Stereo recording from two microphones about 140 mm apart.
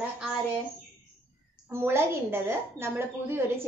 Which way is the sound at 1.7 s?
15° right (ahead or behind).